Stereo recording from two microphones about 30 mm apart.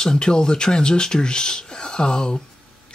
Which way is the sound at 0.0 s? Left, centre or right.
Left.